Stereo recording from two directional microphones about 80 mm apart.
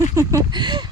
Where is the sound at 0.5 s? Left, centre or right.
Right.